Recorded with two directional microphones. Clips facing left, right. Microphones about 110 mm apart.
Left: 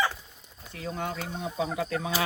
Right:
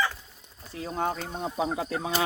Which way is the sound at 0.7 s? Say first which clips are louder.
Right 4 dB; 30° right (ahead or behind).